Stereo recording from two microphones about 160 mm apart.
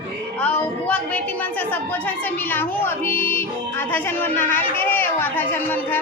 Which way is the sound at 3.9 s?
10° left (ahead or behind).